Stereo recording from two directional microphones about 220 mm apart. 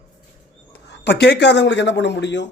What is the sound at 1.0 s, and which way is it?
Speech, 50° left (ahead or behind).